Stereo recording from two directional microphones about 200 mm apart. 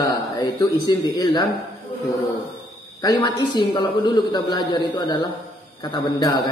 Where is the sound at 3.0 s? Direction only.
20° left (ahead or behind).